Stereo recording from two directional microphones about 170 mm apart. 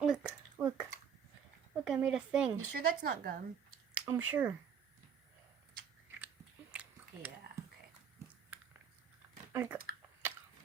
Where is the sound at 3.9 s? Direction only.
10° right (ahead or behind).